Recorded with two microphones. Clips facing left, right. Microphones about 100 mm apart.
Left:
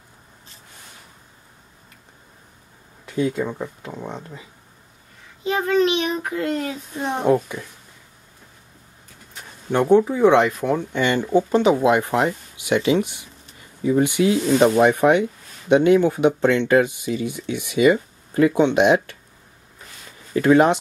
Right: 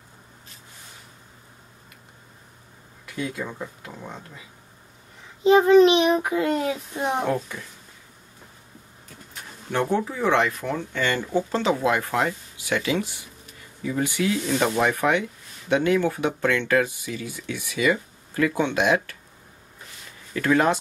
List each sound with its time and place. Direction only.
3.1 s speech: 30° left (ahead or behind)
5.4 s a child's voice: 20° right (ahead or behind)
9.7 s speech: 20° left (ahead or behind)
20.3 s speech: 20° left (ahead or behind)